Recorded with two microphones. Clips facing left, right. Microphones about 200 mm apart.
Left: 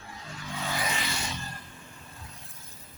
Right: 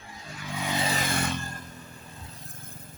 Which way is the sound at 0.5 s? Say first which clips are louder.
Right 3 dB; 15° right (ahead or behind).